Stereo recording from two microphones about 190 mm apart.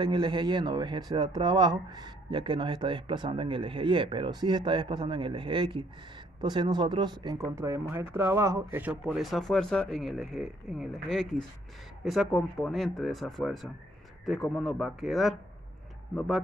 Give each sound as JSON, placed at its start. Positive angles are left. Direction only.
{"t": 0.0, "sound": "speech", "side_deg": -25}
{"t": 9.0, "sound": "speech", "side_deg": 0}